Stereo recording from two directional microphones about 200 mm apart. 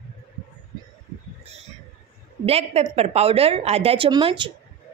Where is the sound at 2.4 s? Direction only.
30° right (ahead or behind).